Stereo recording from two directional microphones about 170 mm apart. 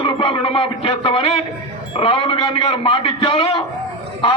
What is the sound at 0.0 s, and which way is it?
A man's voice, 30° left (ahead or behind).